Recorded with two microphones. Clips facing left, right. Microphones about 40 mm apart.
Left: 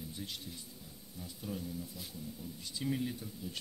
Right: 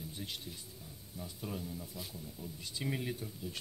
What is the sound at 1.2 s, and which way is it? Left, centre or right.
Speech, right.